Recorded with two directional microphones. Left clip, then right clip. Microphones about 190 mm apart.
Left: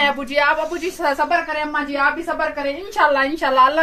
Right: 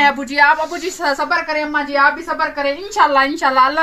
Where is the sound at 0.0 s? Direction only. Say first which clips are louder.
Right 5 dB; 25° left (ahead or behind).